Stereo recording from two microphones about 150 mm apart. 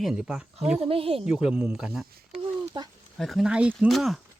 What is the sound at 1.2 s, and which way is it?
Speech, 5° right (ahead or behind).